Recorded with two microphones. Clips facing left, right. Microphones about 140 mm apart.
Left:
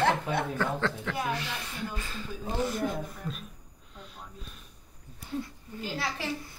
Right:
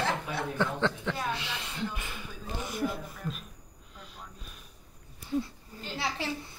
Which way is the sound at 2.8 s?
Centre (ahead or behind).